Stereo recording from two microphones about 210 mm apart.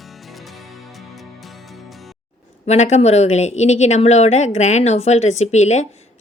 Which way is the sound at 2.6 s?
30° left (ahead or behind).